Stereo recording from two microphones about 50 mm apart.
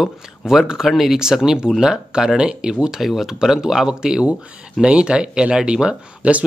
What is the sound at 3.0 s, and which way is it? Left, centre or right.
Speech, centre.